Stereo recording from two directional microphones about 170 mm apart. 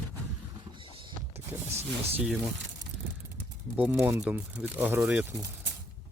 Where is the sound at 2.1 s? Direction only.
5° right (ahead or behind).